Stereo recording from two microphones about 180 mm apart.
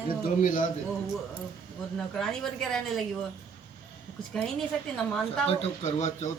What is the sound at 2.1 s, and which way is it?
Speech, 5° left (ahead or behind).